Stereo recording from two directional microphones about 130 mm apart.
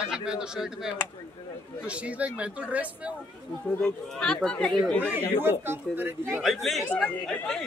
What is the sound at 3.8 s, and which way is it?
Speech, 5° left (ahead or behind).